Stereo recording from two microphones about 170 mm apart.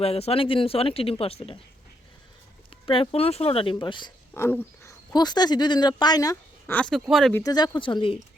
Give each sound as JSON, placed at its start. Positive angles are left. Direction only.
{"t": 0.0, "sound": "speech", "side_deg": 35}
{"t": 2.8, "sound": "speech", "side_deg": 30}
{"t": 4.4, "sound": "speech", "side_deg": 15}
{"t": 6.7, "sound": "speech", "side_deg": 5}
{"t": 7.3, "sound": "speech", "side_deg": 20}